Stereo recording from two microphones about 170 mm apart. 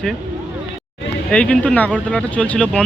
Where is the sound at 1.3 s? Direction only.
5° left (ahead or behind).